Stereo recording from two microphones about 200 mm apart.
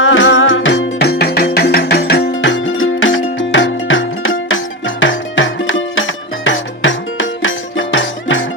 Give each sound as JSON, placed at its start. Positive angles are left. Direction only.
{"t": 0.0, "sound": "music", "side_deg": 70}